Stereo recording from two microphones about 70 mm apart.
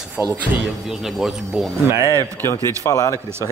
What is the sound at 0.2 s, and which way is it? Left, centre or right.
Speech, right.